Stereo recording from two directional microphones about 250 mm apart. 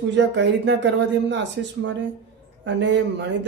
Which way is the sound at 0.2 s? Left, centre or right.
Right.